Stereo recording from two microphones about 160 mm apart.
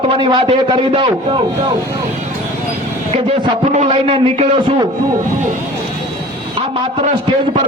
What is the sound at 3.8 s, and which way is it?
Speech, 35° right (ahead or behind).